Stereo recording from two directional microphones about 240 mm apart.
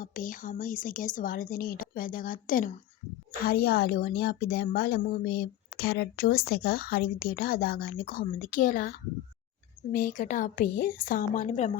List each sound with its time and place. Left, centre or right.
0.0 s speech: left